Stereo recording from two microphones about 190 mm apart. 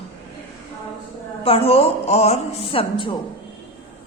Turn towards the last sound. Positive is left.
turn(degrees=25)  # may be behind; listen again after turning